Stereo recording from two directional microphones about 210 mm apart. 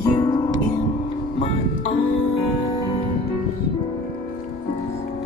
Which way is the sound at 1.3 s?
25° left (ahead or behind).